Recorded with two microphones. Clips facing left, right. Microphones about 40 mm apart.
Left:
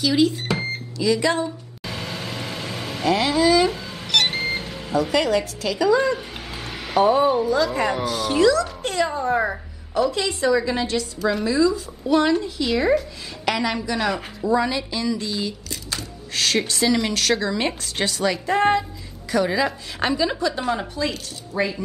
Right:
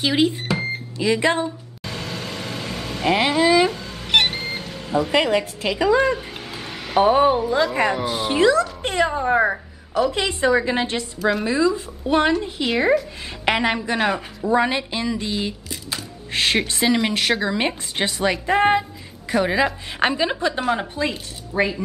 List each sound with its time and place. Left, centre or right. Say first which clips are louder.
0.0 s a woman's voice: even; right
1.9 s vehicle: even; centre
3.1 s a woman's voice: right 1 dB; right
3.7 s cat: even; centre
4.3 s a sound: left 3 dB; centre
5.1 s a woman's voice: right 2 dB; right
6.1 s a sound: right 1 dB; centre
7.0 s a woman's voice: right 1 dB; right
10.1 s a woman's voice: right 1 dB; right
11.6 s a woman's voice: even; right
12.1 s a woman's voice: even; right